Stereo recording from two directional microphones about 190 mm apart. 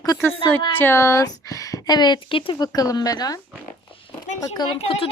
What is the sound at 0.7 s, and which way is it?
Speech, 15° left (ahead or behind).